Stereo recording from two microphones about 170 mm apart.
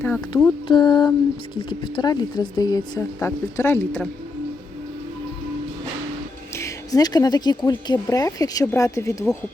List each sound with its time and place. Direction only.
0.0 s speech: 10° left (ahead or behind)
0.7 s speech: 25° left (ahead or behind)
6.5 s speech: 15° left (ahead or behind)